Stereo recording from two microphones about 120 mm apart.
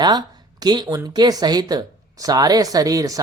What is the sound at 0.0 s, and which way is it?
Speech, 35° right (ahead or behind).